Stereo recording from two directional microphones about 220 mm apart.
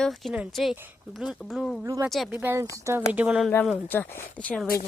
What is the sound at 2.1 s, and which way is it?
Speech, 5° right (ahead or behind).